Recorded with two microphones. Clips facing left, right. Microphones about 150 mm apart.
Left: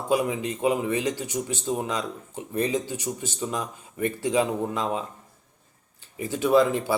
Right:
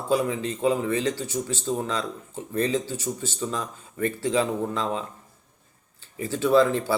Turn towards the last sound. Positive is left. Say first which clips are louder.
# even
turn(degrees=15)  # may be behind; listen again after turning